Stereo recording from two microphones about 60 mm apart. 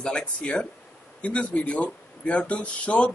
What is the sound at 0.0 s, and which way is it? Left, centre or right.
Speech, centre.